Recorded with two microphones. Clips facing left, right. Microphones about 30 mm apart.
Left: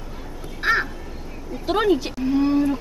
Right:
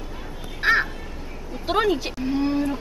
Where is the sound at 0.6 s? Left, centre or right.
Centre.